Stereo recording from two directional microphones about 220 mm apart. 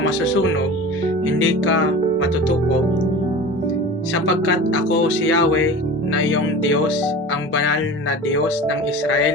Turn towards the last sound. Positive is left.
turn(degrees=65)  # may be behind; listen again after turning